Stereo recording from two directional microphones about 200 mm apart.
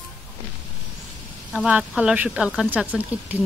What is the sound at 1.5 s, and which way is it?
Speech, 5° right (ahead or behind).